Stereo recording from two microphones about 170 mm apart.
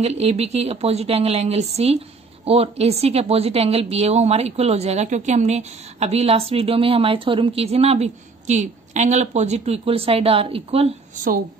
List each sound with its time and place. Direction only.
0.0 s a woman's voice: 40° right (ahead or behind)